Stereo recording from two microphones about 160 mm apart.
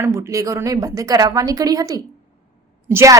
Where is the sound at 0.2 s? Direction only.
20° right (ahead or behind).